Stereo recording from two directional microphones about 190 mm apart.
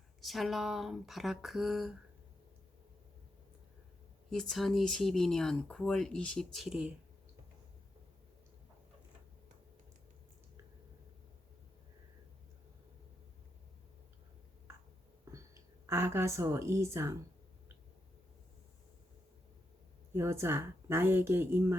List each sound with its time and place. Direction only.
0.2 s speech: centre (ahead or behind)
4.3 s speech: centre (ahead or behind)
15.2 s a sound: 15° right (ahead or behind)
15.9 s speech: 15° right (ahead or behind)
20.1 s speech: 15° right (ahead or behind)